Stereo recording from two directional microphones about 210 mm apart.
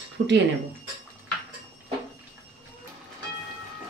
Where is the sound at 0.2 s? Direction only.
50° right (ahead or behind).